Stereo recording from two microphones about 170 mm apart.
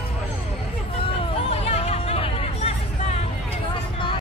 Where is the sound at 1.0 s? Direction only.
35° left (ahead or behind).